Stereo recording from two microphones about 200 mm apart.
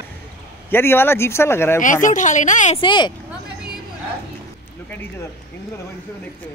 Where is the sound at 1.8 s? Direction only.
40° left (ahead or behind).